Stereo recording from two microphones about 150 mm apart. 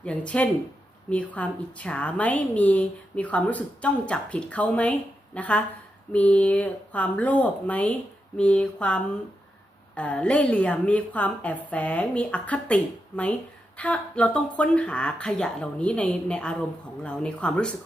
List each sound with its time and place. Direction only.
0.0 s a woman's voice: 10° left (ahead or behind)